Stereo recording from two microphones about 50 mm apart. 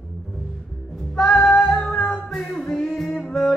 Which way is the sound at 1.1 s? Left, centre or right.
Centre.